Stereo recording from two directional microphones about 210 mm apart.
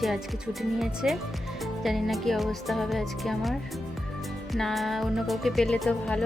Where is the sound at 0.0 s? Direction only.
Centre (ahead or behind).